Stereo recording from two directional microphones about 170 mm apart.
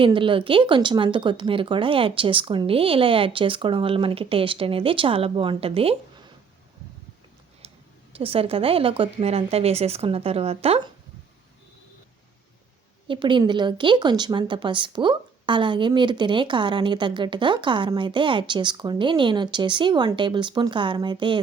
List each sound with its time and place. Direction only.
0.0 s speech: 30° right (ahead or behind)
7.6 s a sound: 35° right (ahead or behind)
8.1 s speech: 35° right (ahead or behind)
13.1 s a woman's voice: 30° right (ahead or behind)